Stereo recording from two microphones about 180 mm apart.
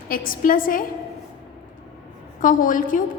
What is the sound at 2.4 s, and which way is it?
Speech, 50° left (ahead or behind).